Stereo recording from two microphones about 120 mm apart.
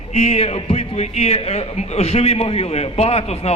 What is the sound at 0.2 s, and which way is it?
A man's voice, 55° left (ahead or behind).